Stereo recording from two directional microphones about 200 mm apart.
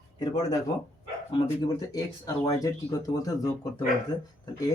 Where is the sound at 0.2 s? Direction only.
20° left (ahead or behind).